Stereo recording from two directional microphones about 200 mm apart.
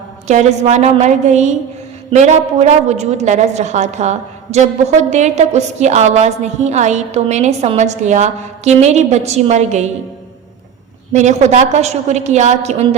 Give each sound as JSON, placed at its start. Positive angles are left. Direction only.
{"t": 0.3, "sound": "a woman's voice", "side_deg": -35}
{"t": 11.1, "sound": "a woman's voice", "side_deg": -35}